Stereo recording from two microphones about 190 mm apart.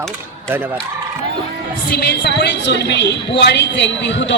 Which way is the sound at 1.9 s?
60° left (ahead or behind).